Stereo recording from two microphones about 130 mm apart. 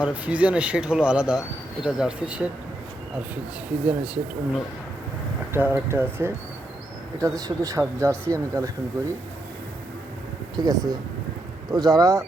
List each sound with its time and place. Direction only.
0.0 s speech: 10° right (ahead or behind)
3.8 s speech: 10° right (ahead or behind)
5.5 s speech: 15° right (ahead or behind)
10.6 s speech: 30° right (ahead or behind)